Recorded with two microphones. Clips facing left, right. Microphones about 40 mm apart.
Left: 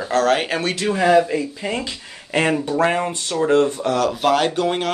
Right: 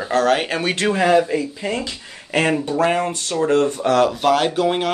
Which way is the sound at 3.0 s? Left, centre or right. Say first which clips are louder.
Right 1 dB; left.